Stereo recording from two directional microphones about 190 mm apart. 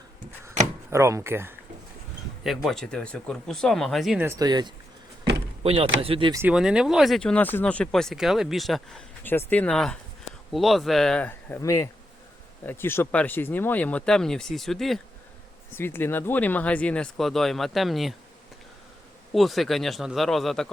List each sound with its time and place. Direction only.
0.9 s speech: 15° right (ahead or behind)
2.4 s speech: centre (ahead or behind)
4.2 s speech: 15° right (ahead or behind)
6.4 s speech: 5° right (ahead or behind)
15.7 s speech: 10° left (ahead or behind)
19.3 s speech: centre (ahead or behind)